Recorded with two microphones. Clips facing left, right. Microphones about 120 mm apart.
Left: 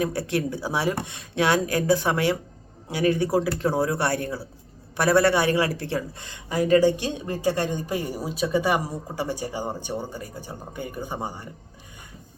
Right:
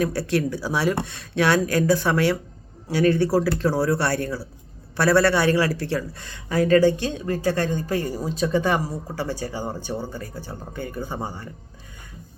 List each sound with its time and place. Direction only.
0.0 s a man's voice: 20° left (ahead or behind)